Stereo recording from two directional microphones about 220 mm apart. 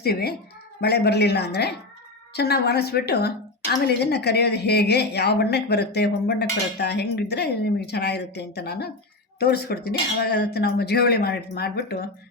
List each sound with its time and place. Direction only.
0.0 s a woman's voice: 45° left (ahead or behind)